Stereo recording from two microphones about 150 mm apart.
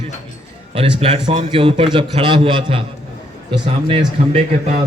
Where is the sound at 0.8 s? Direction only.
40° right (ahead or behind).